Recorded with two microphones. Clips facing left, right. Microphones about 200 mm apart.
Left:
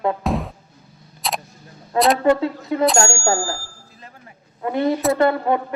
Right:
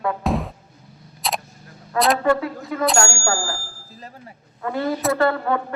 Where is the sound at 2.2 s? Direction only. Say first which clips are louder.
Left 3 dB; 25° left (ahead or behind).